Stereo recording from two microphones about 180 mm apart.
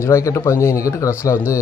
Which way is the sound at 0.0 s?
15° left (ahead or behind).